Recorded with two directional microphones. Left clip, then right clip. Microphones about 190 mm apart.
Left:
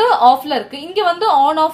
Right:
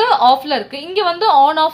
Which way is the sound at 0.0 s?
20° right (ahead or behind).